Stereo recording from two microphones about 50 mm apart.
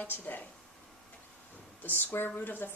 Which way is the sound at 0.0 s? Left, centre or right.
Left.